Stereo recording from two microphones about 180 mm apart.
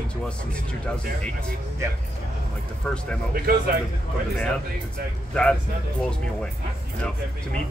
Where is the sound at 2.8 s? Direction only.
5° left (ahead or behind).